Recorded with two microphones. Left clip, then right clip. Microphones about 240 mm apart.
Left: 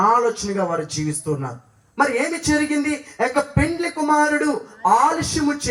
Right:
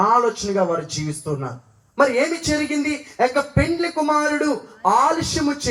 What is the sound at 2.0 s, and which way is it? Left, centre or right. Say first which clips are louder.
A man's voice: right 2 dB; centre.